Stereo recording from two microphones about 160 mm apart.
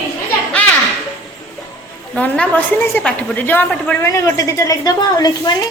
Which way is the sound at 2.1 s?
5° left (ahead or behind).